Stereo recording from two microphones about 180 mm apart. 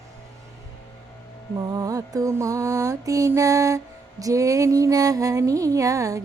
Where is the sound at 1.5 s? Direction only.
20° right (ahead or behind).